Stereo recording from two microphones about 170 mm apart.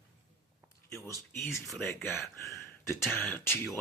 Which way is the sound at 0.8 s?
15° left (ahead or behind).